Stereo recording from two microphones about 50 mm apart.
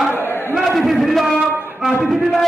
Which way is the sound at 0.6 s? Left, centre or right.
Centre.